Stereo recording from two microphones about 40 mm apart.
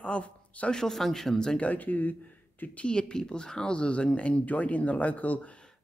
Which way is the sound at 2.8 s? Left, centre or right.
Left.